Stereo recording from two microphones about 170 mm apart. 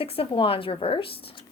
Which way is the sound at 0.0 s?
35° left (ahead or behind).